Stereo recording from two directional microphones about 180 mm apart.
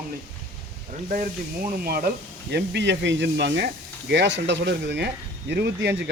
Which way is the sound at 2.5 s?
70° right (ahead or behind).